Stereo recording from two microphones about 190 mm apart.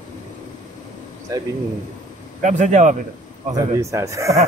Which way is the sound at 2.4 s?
40° right (ahead or behind).